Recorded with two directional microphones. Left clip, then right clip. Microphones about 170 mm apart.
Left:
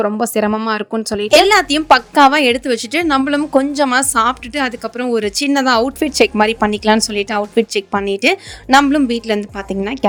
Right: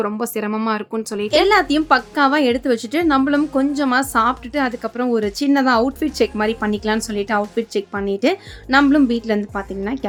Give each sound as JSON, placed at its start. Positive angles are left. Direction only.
{"t": 0.0, "sound": "a woman's voice", "side_deg": 30}
{"t": 1.3, "sound": "a woman's voice", "side_deg": 50}